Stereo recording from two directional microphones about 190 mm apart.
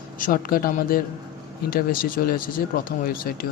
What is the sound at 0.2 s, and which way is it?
Speech, 50° left (ahead or behind).